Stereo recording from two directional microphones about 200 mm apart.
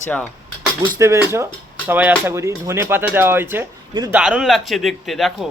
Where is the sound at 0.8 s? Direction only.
15° right (ahead or behind).